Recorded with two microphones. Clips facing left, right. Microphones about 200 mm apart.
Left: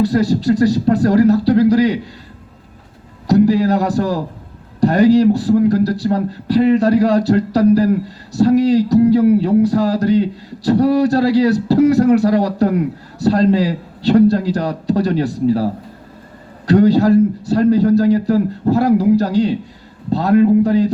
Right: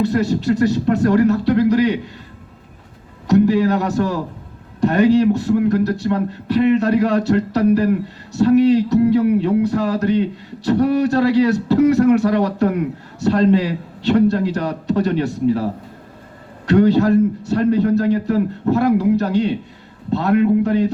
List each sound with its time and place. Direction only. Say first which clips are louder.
0.0 s a man's voice: left 3 dB; 35° left (ahead or behind)
3.2 s a man's voice: left 2 dB; 35° left (ahead or behind)